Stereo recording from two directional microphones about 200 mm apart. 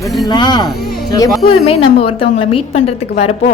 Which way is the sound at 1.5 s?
30° left (ahead or behind).